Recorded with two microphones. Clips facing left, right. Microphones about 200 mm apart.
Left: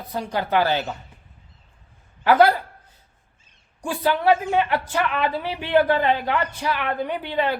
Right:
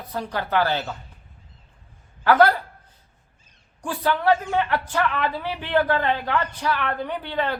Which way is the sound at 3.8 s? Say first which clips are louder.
Left 2 dB; 10° left (ahead or behind).